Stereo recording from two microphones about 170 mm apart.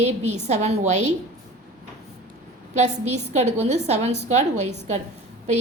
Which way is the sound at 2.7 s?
40° right (ahead or behind).